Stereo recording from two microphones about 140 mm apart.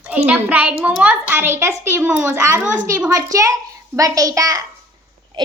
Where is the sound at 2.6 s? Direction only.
65° right (ahead or behind).